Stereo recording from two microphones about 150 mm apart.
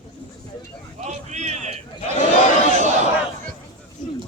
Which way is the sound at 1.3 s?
50° right (ahead or behind).